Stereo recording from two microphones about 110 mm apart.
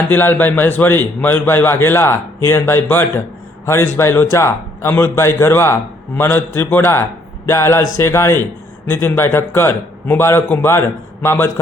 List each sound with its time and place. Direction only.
0.1 s a man's voice: 20° left (ahead or behind)